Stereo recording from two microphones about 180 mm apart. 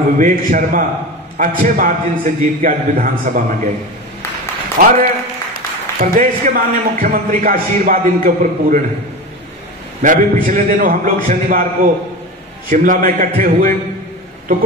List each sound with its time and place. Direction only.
0.2 s a man's voice: 45° right (ahead or behind)
4.7 s a man's voice: 50° right (ahead or behind)
10.0 s a man's voice: 45° right (ahead or behind)
12.6 s a man's voice: 50° right (ahead or behind)